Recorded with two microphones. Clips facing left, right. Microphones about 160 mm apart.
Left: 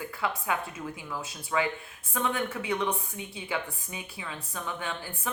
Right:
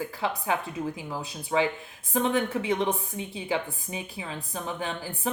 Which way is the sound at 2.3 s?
20° right (ahead or behind).